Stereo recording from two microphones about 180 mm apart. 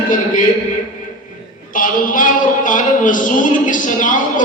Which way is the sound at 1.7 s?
50° left (ahead or behind).